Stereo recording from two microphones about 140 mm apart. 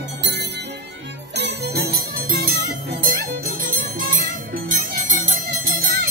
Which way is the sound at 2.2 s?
90° right.